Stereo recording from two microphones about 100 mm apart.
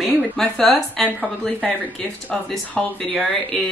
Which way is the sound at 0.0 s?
5° left (ahead or behind).